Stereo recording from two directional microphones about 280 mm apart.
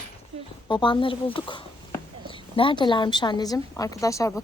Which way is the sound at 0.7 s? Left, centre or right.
Centre.